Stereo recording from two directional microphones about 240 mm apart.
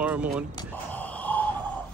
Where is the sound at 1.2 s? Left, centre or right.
Centre.